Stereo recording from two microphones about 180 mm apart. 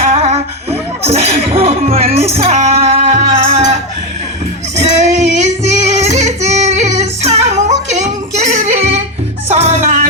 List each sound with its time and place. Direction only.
0.0 s music: 35° right (ahead or behind)
4.8 s child singing: 40° right (ahead or behind)
9.6 s music: 40° right (ahead or behind)